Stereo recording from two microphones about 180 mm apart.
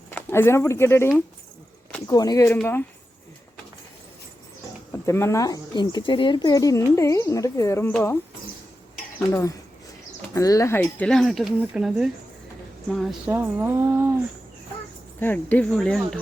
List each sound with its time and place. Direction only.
0.1 s speech: 10° left (ahead or behind)
4.9 s speech: 15° left (ahead or behind)
9.3 s speech: 15° left (ahead or behind)
10.8 s speech: 5° left (ahead or behind); by 14.1 s 15° right (ahead or behind)
15.2 s speech: 10° left (ahead or behind)